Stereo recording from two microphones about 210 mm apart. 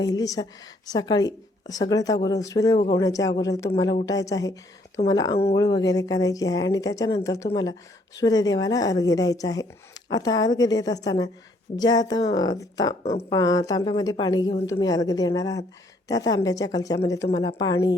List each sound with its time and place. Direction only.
0.0 s speech: 15° left (ahead or behind)